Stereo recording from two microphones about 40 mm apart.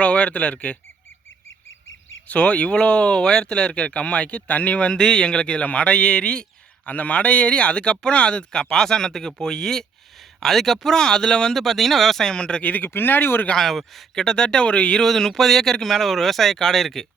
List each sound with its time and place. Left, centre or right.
0.0 s speech: left
2.2 s speech: left
6.8 s speech: left; by 10.9 s centre
10.9 s speech: centre
11.5 s speech: centre
12.3 s speech: left
12.6 s speech: left
12.9 s speech: left
13.6 s speech: centre
14.2 s speech: centre
15.0 s speech: centre